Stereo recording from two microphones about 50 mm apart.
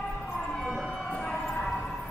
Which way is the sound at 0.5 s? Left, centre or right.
Centre.